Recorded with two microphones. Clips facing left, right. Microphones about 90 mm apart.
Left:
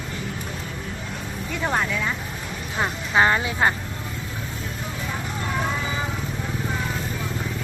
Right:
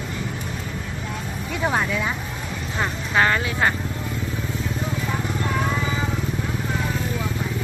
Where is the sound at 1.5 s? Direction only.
5° right (ahead or behind).